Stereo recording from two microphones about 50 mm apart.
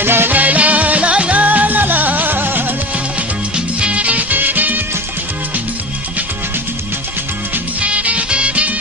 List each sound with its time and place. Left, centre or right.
0.0 s music: right
0.3 s music: right
2.9 s music: right
7.8 s music: right